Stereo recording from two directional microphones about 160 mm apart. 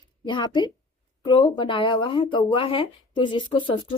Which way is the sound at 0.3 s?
30° left (ahead or behind).